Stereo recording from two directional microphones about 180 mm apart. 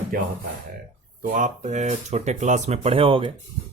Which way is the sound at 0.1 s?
55° right (ahead or behind).